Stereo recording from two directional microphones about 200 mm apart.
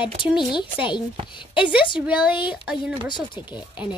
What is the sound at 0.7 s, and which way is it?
Speech, 25° left (ahead or behind).